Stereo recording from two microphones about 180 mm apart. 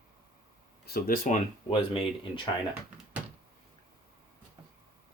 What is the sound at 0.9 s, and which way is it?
Speech, 55° left (ahead or behind).